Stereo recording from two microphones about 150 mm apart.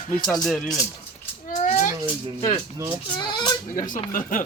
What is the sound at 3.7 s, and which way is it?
Speech, 60° left (ahead or behind).